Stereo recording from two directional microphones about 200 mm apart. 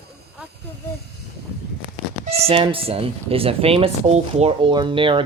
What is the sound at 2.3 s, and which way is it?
Speech, 30° right (ahead or behind).